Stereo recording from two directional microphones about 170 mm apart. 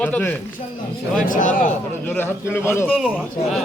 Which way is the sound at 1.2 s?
50° left (ahead or behind).